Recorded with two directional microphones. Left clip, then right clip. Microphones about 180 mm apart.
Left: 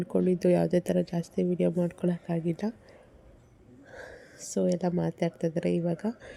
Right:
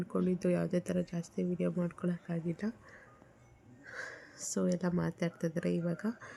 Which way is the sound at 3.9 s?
10° left (ahead or behind).